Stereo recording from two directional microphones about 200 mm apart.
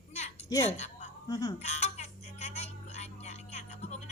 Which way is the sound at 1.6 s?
35° left (ahead or behind).